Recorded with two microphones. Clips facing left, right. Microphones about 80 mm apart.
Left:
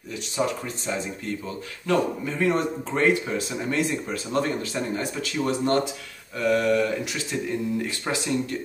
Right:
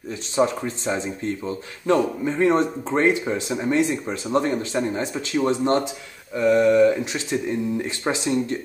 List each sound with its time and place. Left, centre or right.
0.4 s speech: right